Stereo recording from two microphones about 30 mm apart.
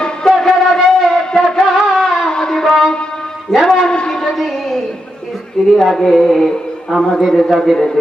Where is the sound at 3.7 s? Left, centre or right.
Left.